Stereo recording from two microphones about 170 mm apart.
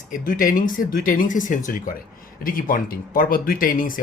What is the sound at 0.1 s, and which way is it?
Speech, 55° left (ahead or behind).